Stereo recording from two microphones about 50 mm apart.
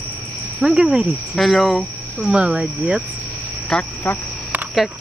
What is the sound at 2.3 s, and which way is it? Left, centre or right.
Speech, right.